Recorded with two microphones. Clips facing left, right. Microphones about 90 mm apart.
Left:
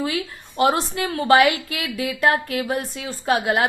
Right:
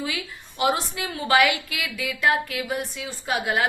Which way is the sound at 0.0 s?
45° left (ahead or behind).